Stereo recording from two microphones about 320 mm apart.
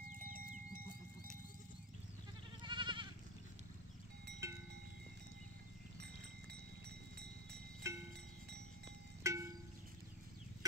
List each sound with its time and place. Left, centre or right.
0.2 s a sound: right
2.6 s goat: centre
7.8 s music: centre
9.2 s music: centre